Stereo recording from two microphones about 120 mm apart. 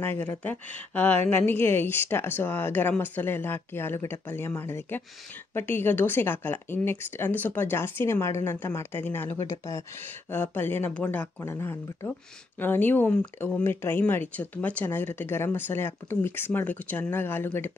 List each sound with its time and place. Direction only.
0.0 s speech: 20° left (ahead or behind)